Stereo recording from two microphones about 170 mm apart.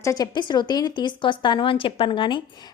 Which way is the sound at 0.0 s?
20° left (ahead or behind).